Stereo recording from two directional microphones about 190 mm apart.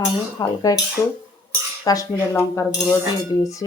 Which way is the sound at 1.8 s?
20° left (ahead or behind).